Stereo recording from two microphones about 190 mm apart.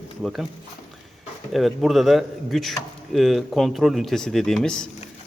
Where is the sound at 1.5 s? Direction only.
Centre (ahead or behind).